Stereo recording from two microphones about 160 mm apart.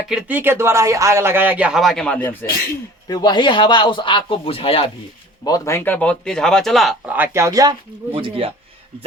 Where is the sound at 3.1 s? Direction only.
25° left (ahead or behind).